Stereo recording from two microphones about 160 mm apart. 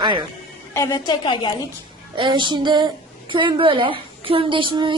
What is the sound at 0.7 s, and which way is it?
Speech, 20° left (ahead or behind).